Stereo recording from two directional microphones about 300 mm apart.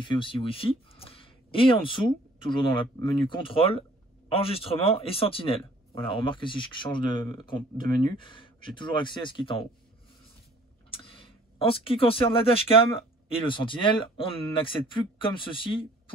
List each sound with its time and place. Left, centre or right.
0.0 s speech: centre
10.9 s speech: centre